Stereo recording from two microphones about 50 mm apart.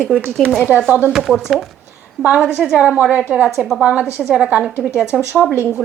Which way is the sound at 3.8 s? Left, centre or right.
Right.